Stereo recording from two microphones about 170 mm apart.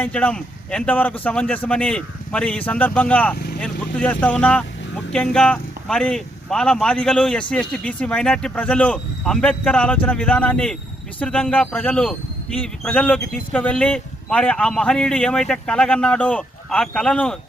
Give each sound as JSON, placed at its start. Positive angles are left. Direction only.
{"t": 0.0, "sound": "speech", "side_deg": 5}
{"t": 3.3, "sound": "vehicle", "side_deg": 65}
{"t": 3.6, "sound": "a man's voice", "side_deg": 10}